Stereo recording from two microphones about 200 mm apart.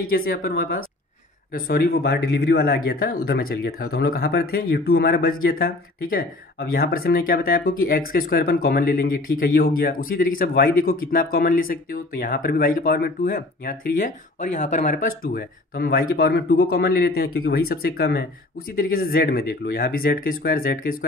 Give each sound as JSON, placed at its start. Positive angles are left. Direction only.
{"t": 0.1, "sound": "speech", "side_deg": 45}